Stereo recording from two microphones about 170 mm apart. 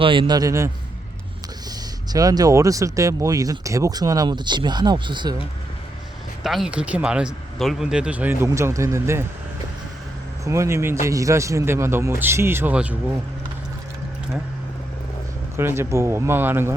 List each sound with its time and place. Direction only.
0.0 s speech: 30° right (ahead or behind)
2.1 s speech: 20° right (ahead or behind)
6.4 s speech: centre (ahead or behind); by 9.2 s 15° right (ahead or behind)
10.4 s speech: 15° right (ahead or behind)
15.5 s speech: 15° right (ahead or behind)